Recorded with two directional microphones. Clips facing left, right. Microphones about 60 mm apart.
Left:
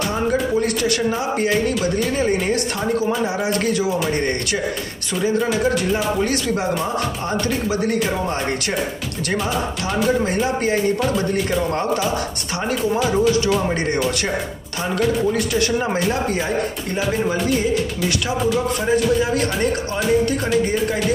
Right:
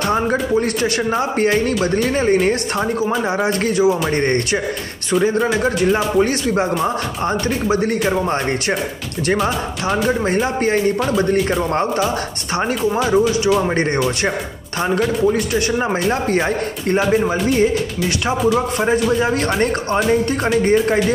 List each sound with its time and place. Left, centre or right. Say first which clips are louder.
0.1 s speech: right 3 dB; right
1.4 s speech: right 2 dB; right
3.6 s speech: right 8 dB; right
4.1 s speech: right 4 dB; right
9.4 s speech: right 3 dB; centre
10.0 s speech: left 1 dB; right
11.0 s speech: right 3 dB; centre
12.5 s speech: right 3 dB; right
13.0 s speech: right 2 dB; centre
15.8 s speech: right 2 dB; right
16.3 s speech: right 3 dB; right
18.9 s speech: even; right